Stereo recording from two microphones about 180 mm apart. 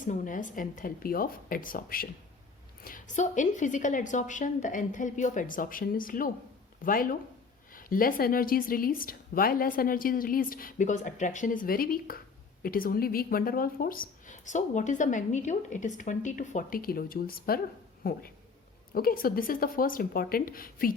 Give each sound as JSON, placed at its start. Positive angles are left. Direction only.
{"t": 0.0, "sound": "speech", "side_deg": 45}